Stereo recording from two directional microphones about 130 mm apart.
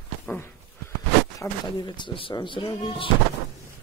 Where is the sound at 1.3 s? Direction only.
35° left (ahead or behind).